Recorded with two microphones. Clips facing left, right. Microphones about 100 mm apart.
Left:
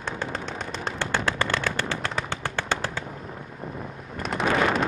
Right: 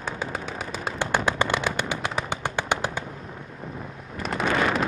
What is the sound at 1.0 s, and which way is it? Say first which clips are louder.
Fireworks: right 3 dB; 15° right (ahead or behind).